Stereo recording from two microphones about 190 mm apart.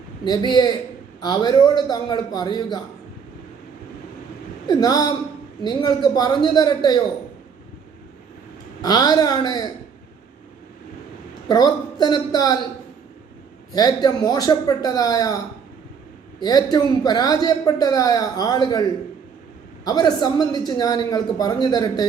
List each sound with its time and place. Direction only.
0.3 s speech: 20° left (ahead or behind)
4.7 s speech: 20° left (ahead or behind)
8.8 s speech: 20° left (ahead or behind)
11.4 s speech: 20° left (ahead or behind)
13.7 s speech: 20° left (ahead or behind)
16.4 s speech: 20° left (ahead or behind)